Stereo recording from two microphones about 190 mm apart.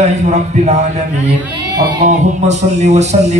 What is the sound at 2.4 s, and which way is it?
A man's voice, 35° right (ahead or behind).